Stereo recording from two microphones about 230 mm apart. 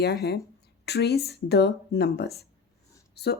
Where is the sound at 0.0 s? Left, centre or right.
Left.